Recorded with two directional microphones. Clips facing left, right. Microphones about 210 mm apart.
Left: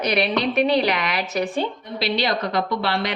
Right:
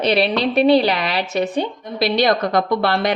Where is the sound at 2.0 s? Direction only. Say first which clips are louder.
Right 6 dB; 50° right (ahead or behind).